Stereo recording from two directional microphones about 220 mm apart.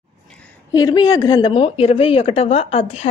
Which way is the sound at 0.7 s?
15° left (ahead or behind).